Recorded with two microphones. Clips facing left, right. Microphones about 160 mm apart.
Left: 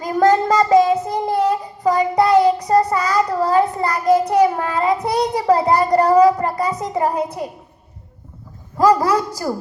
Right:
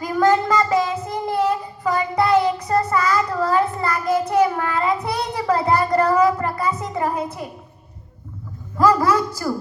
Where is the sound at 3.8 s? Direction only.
20° left (ahead or behind).